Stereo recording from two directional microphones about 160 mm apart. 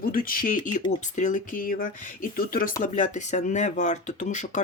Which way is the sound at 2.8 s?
50° left (ahead or behind).